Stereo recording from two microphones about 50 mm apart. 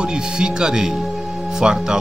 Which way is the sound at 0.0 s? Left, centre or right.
Centre.